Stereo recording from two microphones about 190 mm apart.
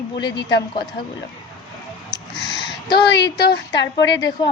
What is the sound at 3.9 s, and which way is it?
Speech, 20° left (ahead or behind).